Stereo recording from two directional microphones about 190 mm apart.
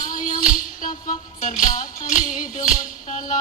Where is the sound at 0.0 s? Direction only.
45° left (ahead or behind).